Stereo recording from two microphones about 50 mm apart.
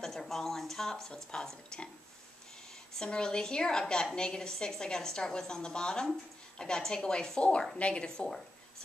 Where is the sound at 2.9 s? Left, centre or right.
Centre.